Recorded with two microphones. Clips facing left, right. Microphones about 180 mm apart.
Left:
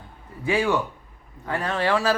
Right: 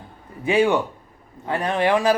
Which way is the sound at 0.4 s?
20° right (ahead or behind).